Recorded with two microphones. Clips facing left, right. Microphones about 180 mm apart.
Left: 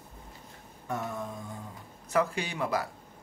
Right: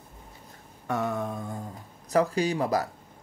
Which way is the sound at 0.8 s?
80° right.